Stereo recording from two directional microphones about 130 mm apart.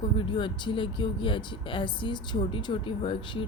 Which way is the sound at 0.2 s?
40° left (ahead or behind).